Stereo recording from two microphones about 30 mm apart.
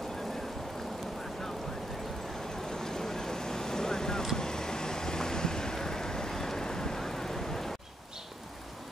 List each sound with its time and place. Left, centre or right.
2.5 s vehicle: centre